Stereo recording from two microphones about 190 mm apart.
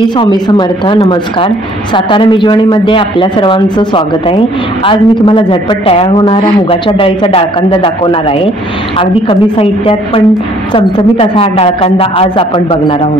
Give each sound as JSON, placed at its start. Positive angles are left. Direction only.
{"t": 0.2, "sound": "speech", "side_deg": 25}